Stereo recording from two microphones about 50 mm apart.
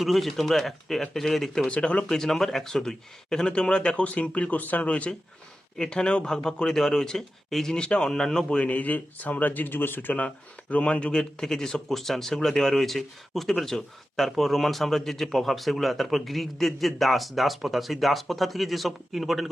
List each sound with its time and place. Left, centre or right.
0.0 s speech: centre
4.0 s speech: left; by 8.4 s centre
8.4 s speech: left
10.2 s speech: left; by 19.5 s centre